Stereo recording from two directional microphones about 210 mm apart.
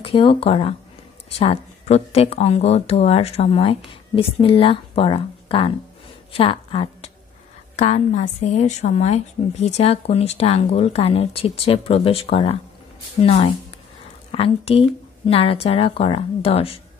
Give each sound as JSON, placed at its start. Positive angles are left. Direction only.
{"t": 0.0, "sound": "a woman's voice", "side_deg": 25}